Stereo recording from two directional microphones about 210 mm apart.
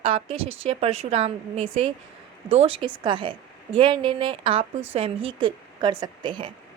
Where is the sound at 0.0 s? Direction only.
25° right (ahead or behind).